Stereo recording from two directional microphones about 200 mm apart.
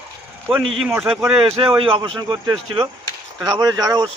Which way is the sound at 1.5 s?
25° right (ahead or behind).